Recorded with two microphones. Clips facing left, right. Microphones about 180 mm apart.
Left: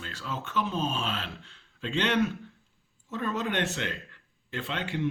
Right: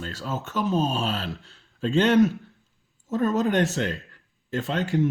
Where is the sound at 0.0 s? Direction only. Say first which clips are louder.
Right 5 dB; 40° right (ahead or behind).